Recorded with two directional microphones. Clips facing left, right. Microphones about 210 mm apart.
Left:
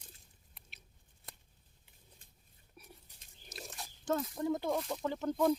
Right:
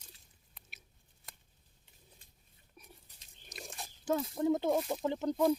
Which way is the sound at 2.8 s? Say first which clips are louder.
Left 1 dB; 10° left (ahead or behind).